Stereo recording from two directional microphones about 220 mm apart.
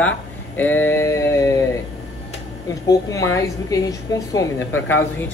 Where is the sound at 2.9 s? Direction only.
15° left (ahead or behind).